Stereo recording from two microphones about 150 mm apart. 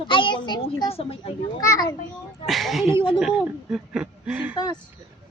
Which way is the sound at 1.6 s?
25° left (ahead or behind).